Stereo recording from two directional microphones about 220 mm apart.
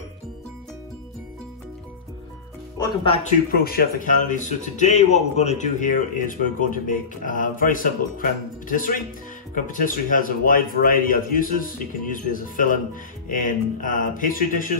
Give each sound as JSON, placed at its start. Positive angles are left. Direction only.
{"t": 2.8, "sound": "speech", "side_deg": 20}
{"t": 3.3, "sound": "speech", "side_deg": 45}